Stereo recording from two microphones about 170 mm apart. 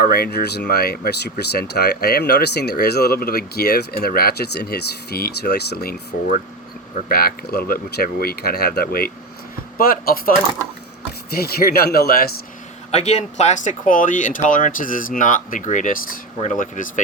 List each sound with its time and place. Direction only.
0.0 s speech: 65° left (ahead or behind)
11.3 s speech: 65° left (ahead or behind)
12.9 s speech: 40° left (ahead or behind)